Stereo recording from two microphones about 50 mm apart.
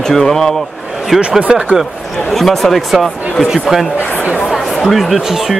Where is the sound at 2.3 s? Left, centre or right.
Centre.